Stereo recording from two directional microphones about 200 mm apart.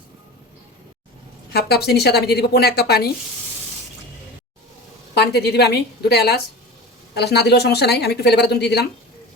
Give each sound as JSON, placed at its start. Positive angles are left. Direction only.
{"t": 1.5, "sound": "a woman's voice", "side_deg": 55}
{"t": 5.1, "sound": "a woman's voice", "side_deg": 55}